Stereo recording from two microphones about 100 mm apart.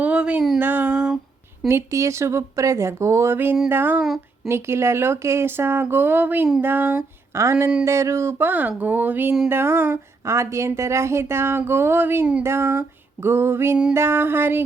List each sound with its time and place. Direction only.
0.0 s a sound: 15° right (ahead or behind)
1.6 s speech: 30° right (ahead or behind)
12.4 s speech: 25° right (ahead or behind)